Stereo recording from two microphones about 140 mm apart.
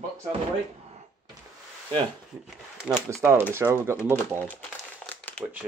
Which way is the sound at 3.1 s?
15° right (ahead or behind).